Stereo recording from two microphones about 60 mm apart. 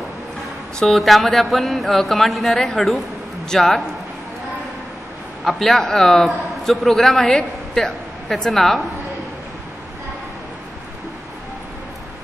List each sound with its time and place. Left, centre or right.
0.7 s speech: centre
5.4 s a man's voice: centre